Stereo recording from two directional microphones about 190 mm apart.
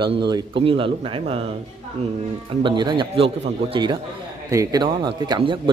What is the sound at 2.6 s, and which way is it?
Speech, 25° right (ahead or behind).